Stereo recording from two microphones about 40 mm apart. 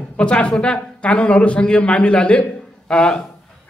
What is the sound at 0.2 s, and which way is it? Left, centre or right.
A man's voice, left.